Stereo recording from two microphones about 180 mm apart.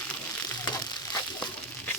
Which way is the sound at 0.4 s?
20° left (ahead or behind).